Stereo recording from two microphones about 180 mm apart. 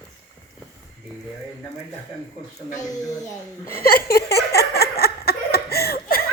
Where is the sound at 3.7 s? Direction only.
55° left (ahead or behind).